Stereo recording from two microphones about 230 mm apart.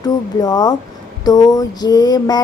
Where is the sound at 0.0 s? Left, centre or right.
Centre.